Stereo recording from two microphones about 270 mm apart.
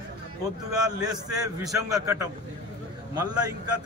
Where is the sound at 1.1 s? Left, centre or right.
Centre.